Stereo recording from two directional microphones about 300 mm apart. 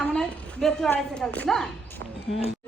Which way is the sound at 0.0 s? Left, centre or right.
Centre.